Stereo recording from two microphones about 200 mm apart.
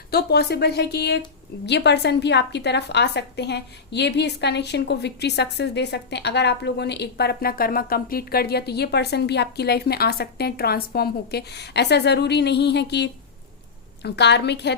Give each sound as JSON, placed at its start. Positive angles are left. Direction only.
{"t": 0.1, "sound": "a woman's voice", "side_deg": 55}